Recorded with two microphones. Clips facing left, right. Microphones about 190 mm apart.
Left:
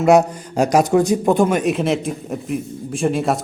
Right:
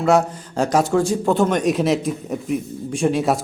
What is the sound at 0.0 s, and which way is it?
A man's voice, 15° left (ahead or behind).